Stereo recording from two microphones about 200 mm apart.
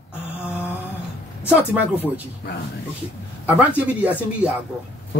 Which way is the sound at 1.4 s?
10° right (ahead or behind).